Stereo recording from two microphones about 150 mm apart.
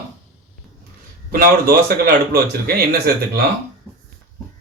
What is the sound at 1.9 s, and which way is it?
Speech, 90° right.